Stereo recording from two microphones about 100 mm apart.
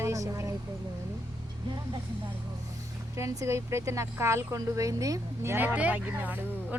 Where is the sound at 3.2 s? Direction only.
30° right (ahead or behind).